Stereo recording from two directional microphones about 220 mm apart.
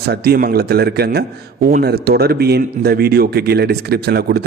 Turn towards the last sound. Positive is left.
turn(degrees=-45)  # may be behind; listen again after turning